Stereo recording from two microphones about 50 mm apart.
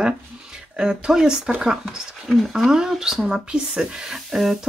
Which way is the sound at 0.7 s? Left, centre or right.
Centre.